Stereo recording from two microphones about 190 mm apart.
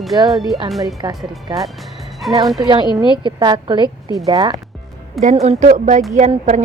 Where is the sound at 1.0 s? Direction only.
20° right (ahead or behind).